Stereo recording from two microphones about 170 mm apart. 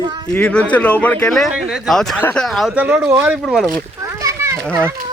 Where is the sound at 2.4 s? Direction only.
Centre (ahead or behind).